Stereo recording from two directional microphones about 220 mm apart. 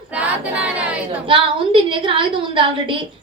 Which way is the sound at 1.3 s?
25° right (ahead or behind).